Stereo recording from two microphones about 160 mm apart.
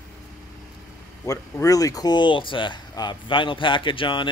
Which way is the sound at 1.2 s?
20° left (ahead or behind).